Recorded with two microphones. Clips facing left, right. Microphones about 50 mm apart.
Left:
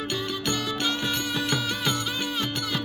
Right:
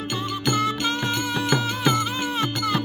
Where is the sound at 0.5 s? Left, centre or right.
Right.